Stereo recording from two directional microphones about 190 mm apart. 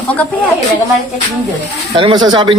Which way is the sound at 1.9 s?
25° right (ahead or behind).